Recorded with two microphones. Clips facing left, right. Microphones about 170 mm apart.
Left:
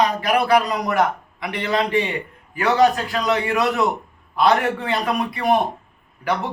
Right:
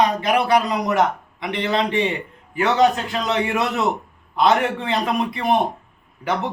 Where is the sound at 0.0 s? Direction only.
20° right (ahead or behind).